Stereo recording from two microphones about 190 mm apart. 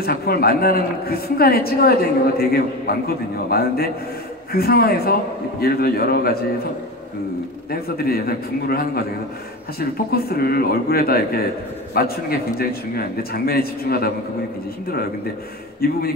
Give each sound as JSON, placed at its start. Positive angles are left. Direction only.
{"t": 0.0, "sound": "a woman's voice", "side_deg": 55}
{"t": 7.7, "sound": "a woman's voice", "side_deg": 55}
{"t": 15.8, "sound": "a woman's voice", "side_deg": 55}